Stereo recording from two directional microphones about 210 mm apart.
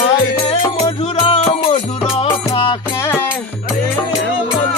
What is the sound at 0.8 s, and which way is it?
Music, 25° left (ahead or behind).